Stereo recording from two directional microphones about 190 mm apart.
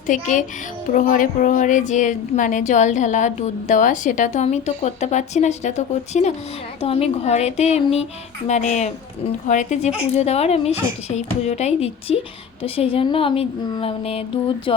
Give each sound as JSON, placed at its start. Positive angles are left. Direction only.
{"t": 0.1, "sound": "a child's voice", "side_deg": 40}